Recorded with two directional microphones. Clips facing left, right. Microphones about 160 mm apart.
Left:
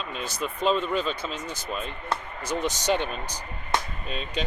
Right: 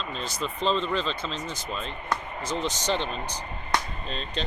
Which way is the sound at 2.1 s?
30° left (ahead or behind).